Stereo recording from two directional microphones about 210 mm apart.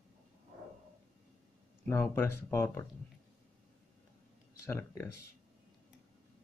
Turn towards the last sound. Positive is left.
turn(degrees=10)  # may be behind; listen again after turning